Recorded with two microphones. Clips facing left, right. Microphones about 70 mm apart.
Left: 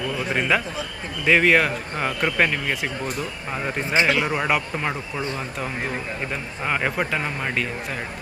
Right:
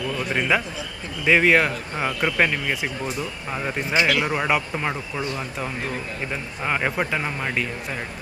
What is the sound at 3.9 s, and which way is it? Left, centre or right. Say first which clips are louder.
Speech: left 1 dB; left.